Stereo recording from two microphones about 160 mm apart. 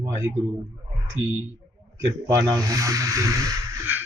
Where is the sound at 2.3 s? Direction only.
20° right (ahead or behind).